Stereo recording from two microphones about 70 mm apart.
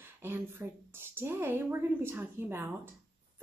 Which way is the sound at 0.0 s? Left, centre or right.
Right.